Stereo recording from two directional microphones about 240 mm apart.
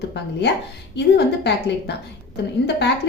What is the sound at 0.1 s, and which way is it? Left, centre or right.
A woman's voice, left.